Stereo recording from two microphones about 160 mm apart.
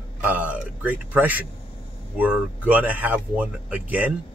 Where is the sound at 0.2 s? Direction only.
10° right (ahead or behind).